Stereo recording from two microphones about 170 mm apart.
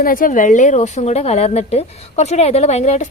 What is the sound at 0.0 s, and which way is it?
A woman's voice, 55° left (ahead or behind).